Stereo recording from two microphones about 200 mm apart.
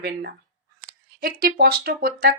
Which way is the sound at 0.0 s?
50° right (ahead or behind).